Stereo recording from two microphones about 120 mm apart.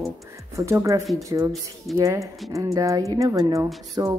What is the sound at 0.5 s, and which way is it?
Speech, 25° right (ahead or behind).